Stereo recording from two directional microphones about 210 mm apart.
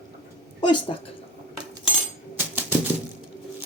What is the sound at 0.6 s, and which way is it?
Speech, 25° left (ahead or behind).